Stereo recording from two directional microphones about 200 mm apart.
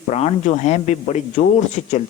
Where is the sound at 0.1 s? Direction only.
35° left (ahead or behind).